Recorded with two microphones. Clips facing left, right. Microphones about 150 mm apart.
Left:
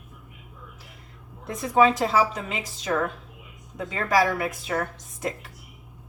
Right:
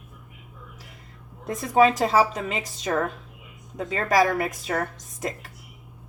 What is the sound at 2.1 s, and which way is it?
Speech, 45° right (ahead or behind).